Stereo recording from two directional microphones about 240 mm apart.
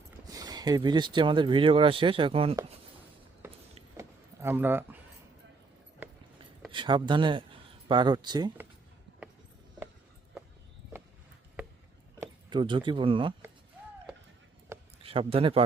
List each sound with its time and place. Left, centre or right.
0.3 s speech: centre
3.9 s a sound: centre
6.7 s speech: centre
12.2 s speech: centre
14.7 s a sound: centre
15.0 s a man's voice: right